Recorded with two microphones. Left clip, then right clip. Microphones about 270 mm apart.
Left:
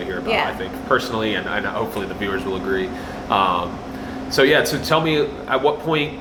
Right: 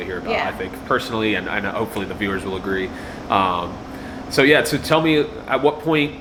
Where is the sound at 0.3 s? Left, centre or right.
Left.